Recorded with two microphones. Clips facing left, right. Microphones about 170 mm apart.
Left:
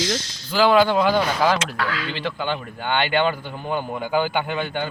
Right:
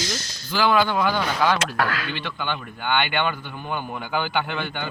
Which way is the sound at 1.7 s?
55° right (ahead or behind).